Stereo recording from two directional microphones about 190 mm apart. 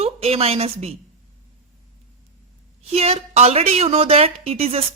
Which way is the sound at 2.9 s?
30° right (ahead or behind).